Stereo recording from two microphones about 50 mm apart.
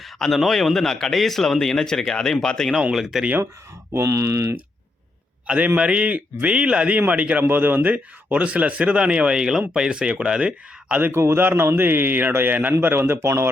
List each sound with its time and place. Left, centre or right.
0.0 s speech: centre
2.9 s speech: centre
3.9 s speech: right
5.5 s speech: right
7.4 s speech: right; by 10.9 s centre
11.3 s a man's voice: right